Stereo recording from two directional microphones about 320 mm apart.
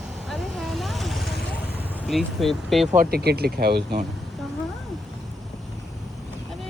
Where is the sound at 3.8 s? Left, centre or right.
Centre.